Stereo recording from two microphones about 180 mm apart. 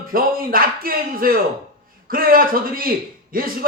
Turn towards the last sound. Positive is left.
turn(degrees=-55)  # may be behind; listen again after turning